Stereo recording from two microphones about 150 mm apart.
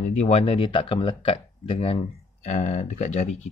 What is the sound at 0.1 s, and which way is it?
Speech, 45° left (ahead or behind).